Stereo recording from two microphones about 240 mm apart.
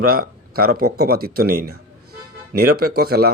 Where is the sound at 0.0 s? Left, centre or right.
Right.